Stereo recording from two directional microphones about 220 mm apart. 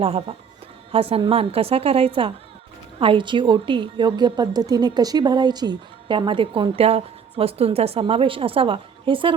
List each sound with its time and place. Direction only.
0.0 s a woman's voice: 25° right (ahead or behind)